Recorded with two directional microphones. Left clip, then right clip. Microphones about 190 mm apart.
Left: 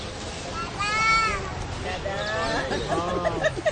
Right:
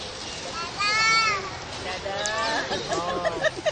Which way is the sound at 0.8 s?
25° right (ahead or behind).